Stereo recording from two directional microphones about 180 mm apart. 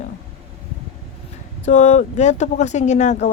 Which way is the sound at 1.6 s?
40° left (ahead or behind).